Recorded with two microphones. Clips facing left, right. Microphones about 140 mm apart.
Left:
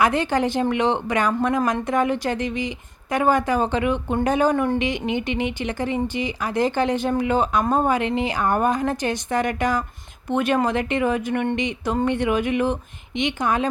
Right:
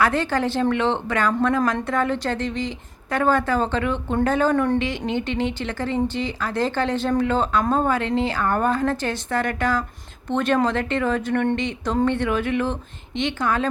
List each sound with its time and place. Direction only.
0.0 s a woman's voice: 15° left (ahead or behind)
4.5 s speech: 5° left (ahead or behind)
4.8 s a woman's voice: 15° left (ahead or behind)